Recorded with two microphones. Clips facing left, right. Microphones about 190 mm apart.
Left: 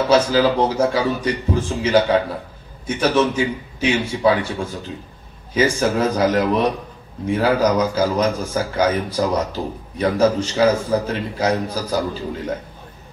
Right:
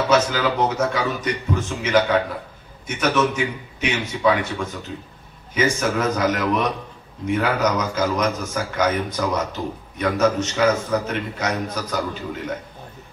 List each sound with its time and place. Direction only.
0.1 s a man's voice: 30° left (ahead or behind)